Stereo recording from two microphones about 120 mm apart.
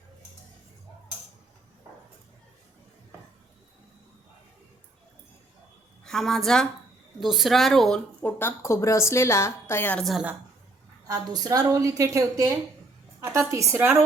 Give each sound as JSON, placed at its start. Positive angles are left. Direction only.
{"t": 6.1, "sound": "speech", "side_deg": 5}
{"t": 8.2, "sound": "a woman's voice", "side_deg": 20}
{"t": 10.0, "sound": "speech", "side_deg": 0}
{"t": 11.0, "sound": "a woman's voice", "side_deg": -35}
{"t": 13.1, "sound": "a sound", "side_deg": -25}
{"t": 13.5, "sound": "a woman's voice", "side_deg": -25}